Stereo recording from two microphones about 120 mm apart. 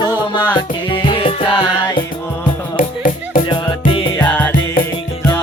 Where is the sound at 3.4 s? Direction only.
40° left (ahead or behind).